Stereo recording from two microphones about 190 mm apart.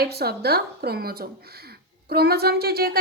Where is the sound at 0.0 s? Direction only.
55° right (ahead or behind).